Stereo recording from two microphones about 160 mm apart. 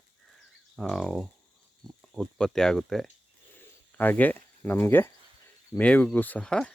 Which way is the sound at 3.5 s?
10° left (ahead or behind).